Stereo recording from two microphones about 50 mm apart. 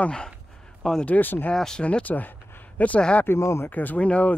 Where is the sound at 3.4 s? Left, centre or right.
Left.